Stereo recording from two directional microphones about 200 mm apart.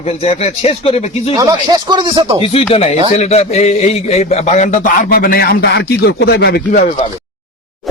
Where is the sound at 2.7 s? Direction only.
30° left (ahead or behind); by 6.6 s 55° left (ahead or behind).